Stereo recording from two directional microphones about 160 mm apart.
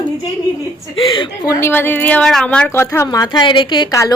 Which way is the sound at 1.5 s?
15° left (ahead or behind).